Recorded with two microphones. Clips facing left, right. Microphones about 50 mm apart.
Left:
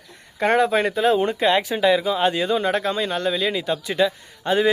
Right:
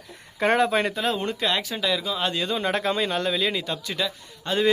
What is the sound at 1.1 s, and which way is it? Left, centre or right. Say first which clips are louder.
Speech: left 7 dB; centre.